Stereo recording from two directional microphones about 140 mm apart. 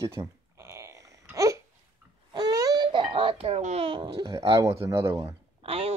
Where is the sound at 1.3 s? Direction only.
25° right (ahead or behind).